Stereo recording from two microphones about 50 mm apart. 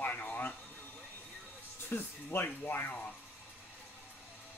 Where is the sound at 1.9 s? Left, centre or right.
Left.